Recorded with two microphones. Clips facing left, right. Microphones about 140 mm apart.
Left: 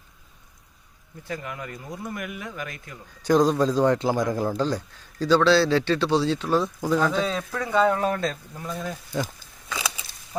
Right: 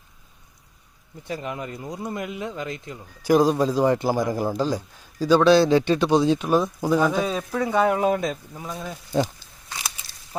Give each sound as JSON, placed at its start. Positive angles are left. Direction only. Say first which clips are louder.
{"t": 1.2, "sound": "speech", "louder": "right 3 dB", "side_deg": -20}
{"t": 3.2, "sound": "a man's voice", "louder": "right 1 dB", "side_deg": -10}